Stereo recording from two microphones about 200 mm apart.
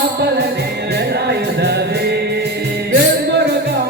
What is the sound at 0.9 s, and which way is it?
Music, 55° right (ahead or behind).